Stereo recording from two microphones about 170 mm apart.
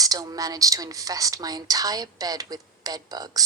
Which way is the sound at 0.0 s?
20° right (ahead or behind).